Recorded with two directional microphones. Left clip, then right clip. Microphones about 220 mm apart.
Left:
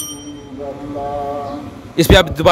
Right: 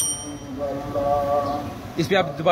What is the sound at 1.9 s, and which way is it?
Speech, 50° left (ahead or behind).